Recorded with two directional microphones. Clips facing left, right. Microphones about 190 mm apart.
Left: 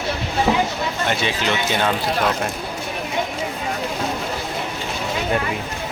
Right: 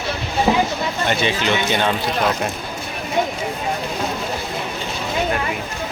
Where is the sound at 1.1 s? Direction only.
Centre (ahead or behind).